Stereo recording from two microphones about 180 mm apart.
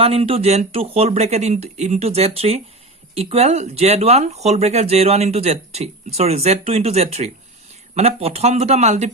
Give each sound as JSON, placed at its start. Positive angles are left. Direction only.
{"t": 0.0, "sound": "speech", "side_deg": -35}